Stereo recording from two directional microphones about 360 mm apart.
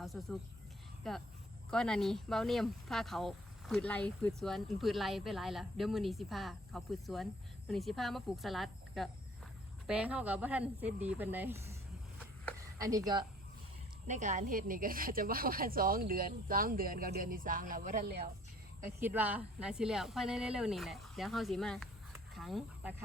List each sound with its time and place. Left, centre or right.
0.0 s speech: centre
14.1 s a woman's voice: right
18.9 s speech: centre